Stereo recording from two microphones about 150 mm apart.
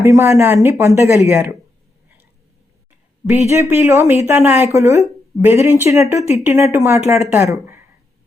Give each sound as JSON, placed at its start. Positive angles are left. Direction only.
{"t": 0.0, "sound": "a woman's voice", "side_deg": -20}
{"t": 3.2, "sound": "a woman's voice", "side_deg": -20}